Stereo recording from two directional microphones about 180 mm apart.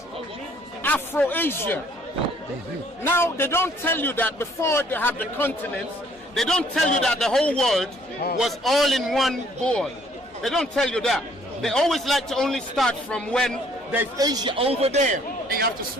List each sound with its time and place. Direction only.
0.8 s a man's voice: 10° left (ahead or behind)
3.0 s a man's voice: 10° left (ahead or behind)
13.9 s a man's voice: 15° right (ahead or behind); by 15.2 s 35° right (ahead or behind)